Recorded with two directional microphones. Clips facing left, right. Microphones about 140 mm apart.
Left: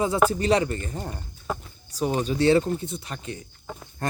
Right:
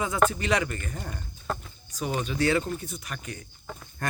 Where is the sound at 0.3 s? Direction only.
35° left (ahead or behind).